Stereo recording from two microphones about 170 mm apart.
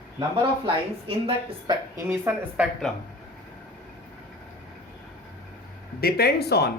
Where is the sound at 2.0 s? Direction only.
15° right (ahead or behind).